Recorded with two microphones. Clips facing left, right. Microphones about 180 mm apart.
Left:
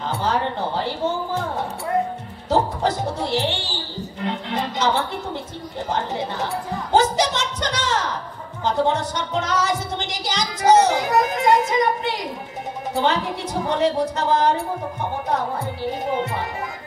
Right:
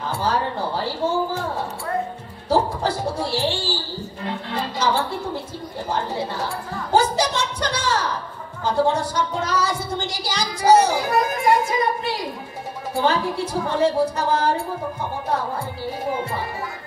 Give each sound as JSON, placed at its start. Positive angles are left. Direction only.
{"t": 0.2, "sound": "speech", "side_deg": 20}
{"t": 2.5, "sound": "a woman's voice", "side_deg": 20}
{"t": 15.8, "sound": "speech", "side_deg": 20}